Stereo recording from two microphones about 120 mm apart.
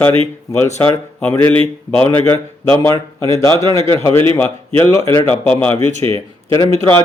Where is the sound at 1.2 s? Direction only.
10° left (ahead or behind).